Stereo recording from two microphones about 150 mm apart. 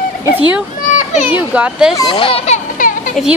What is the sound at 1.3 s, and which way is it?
Speech, 10° right (ahead or behind).